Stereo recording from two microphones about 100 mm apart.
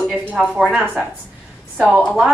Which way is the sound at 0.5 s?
5° right (ahead or behind).